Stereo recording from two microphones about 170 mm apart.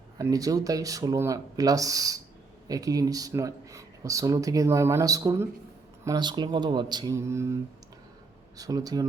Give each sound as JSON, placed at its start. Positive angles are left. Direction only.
{"t": 0.2, "sound": "speech", "side_deg": -20}